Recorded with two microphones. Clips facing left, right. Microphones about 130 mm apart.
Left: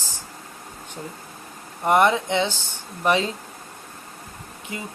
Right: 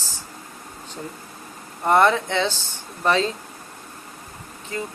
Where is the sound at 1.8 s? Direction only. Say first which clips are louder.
Right 1 dB; 15° left (ahead or behind).